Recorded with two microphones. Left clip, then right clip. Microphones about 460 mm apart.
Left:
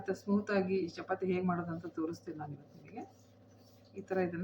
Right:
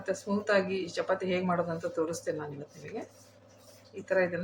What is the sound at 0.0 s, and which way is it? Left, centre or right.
Speech, left.